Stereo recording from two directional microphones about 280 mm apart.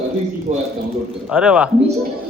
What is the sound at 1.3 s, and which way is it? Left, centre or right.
Speech, centre.